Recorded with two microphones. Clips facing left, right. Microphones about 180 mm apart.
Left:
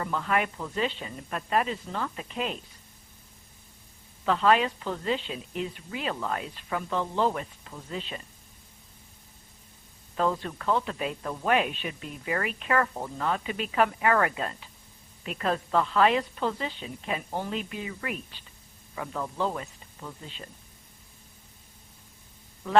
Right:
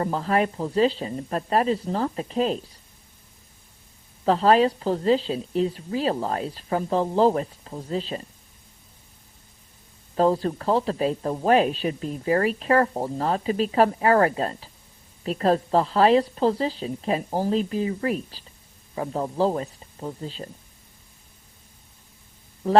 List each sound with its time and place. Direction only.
0.0 s speech: 35° right (ahead or behind)
4.3 s speech: 35° right (ahead or behind)
10.2 s speech: 35° right (ahead or behind)
22.6 s speech: 40° right (ahead or behind)